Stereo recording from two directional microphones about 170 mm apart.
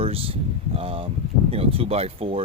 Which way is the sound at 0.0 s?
35° right (ahead or behind).